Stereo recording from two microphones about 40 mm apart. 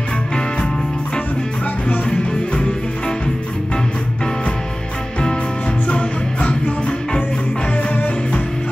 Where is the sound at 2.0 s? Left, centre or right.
Left.